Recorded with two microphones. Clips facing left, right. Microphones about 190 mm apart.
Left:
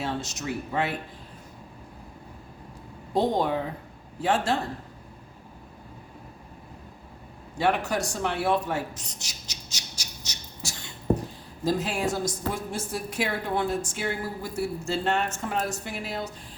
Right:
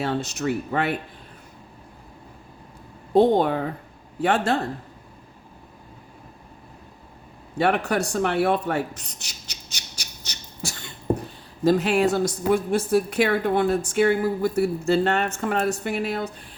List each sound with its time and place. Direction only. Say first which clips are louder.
0.0 s a woman's voice: right 6 dB; 60° right (ahead or behind)
3.2 s a woman's voice: right 7 dB; 60° right (ahead or behind)
7.6 s a woman's voice: right 4 dB; 60° right (ahead or behind)